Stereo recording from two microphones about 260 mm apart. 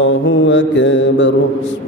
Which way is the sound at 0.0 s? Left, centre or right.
Left.